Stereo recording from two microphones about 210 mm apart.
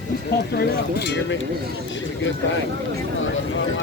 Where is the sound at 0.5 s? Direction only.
50° left (ahead or behind).